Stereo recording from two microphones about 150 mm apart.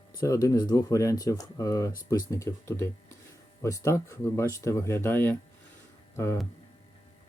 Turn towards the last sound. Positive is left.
turn(degrees=15)  # may be behind; listen again after turning